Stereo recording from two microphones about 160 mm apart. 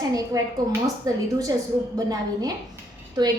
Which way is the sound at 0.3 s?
25° right (ahead or behind).